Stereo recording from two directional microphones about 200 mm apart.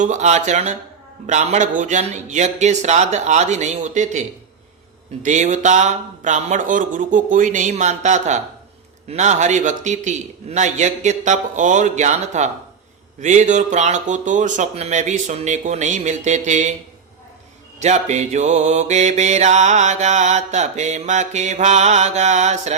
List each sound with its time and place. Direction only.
0.0 s mantra: 35° right (ahead or behind)
5.2 s mantra: 35° right (ahead or behind)
17.7 s mantra: 35° right (ahead or behind)